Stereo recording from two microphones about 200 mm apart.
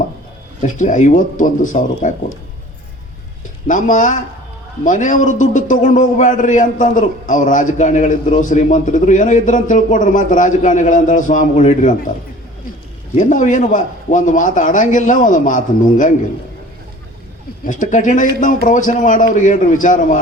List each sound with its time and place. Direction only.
0.8 s a man's voice: 35° left (ahead or behind)
3.7 s a man's voice: 40° left (ahead or behind)
13.1 s a man's voice: 40° left (ahead or behind)
17.7 s a man's voice: 40° left (ahead or behind)